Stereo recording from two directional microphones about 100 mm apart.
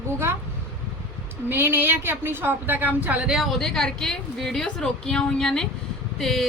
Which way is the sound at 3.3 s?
Centre (ahead or behind).